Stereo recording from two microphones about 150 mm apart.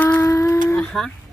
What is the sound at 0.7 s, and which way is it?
Speech, 5° left (ahead or behind).